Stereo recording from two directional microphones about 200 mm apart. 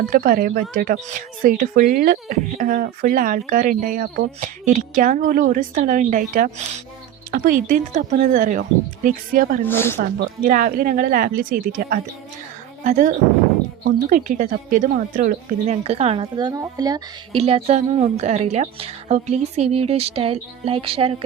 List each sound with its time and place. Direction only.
0.1 s a woman's voice: 45° right (ahead or behind)
9.6 s speech: 10° left (ahead or behind)
10.0 s a woman's voice: 45° right (ahead or behind); by 17.0 s 20° right (ahead or behind)
17.3 s a woman's voice: 30° right (ahead or behind)